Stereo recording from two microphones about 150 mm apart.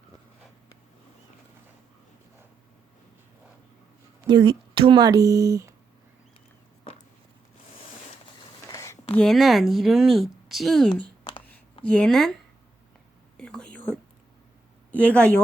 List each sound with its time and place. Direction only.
4.3 s speech: 30° right (ahead or behind)
8.6 s a sound: 20° left (ahead or behind)
9.1 s speech: centre (ahead or behind)
11.2 s a sound: 35° left (ahead or behind)
11.9 s speech: 5° left (ahead or behind)
13.3 s whispering: 5° left (ahead or behind)
14.9 s speech: 10° left (ahead or behind)